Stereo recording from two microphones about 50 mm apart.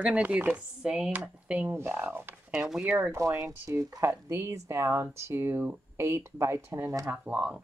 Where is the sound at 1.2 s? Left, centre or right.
Right.